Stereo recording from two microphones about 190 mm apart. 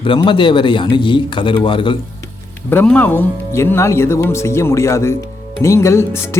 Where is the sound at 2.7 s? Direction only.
10° left (ahead or behind).